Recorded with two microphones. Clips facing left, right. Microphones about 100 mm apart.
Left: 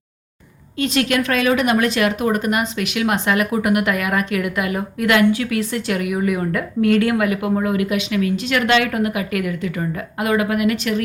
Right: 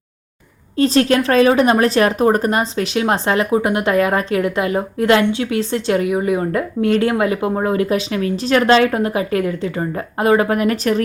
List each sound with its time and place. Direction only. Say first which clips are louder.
0.8 s speech: right 5 dB; 35° right (ahead or behind)